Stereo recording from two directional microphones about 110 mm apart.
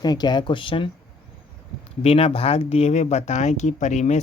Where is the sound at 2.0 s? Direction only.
65° left (ahead or behind); by 4.1 s 90° left.